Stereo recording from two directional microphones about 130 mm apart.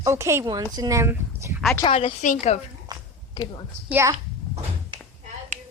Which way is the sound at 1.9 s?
45° left (ahead or behind).